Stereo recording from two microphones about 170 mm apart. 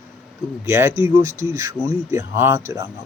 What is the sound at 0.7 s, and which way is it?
Speech, 15° right (ahead or behind).